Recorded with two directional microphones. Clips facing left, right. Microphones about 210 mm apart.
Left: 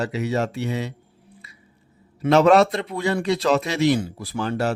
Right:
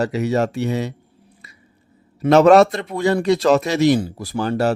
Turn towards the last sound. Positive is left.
turn(degrees=-40)  # may be behind; listen again after turning